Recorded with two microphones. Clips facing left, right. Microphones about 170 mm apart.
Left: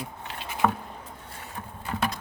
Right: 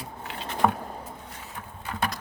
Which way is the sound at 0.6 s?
10° right (ahead or behind).